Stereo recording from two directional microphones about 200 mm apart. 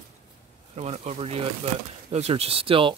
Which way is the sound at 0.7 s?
30° right (ahead or behind).